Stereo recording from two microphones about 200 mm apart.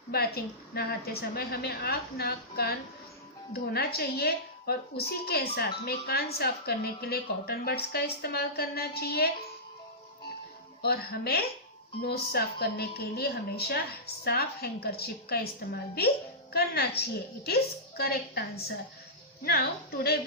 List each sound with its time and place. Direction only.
0.1 s a woman's voice: 50° left (ahead or behind)
10.8 s a woman's voice: 50° left (ahead or behind)